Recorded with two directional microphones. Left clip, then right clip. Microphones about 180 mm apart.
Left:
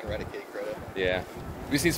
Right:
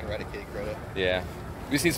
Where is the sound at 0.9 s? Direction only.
10° right (ahead or behind).